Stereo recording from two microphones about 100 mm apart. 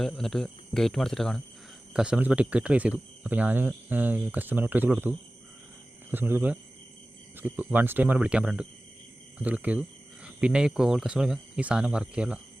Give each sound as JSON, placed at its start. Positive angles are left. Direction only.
{"t": 0.0, "sound": "speech", "side_deg": 5}
{"t": 1.9, "sound": "speech", "side_deg": -10}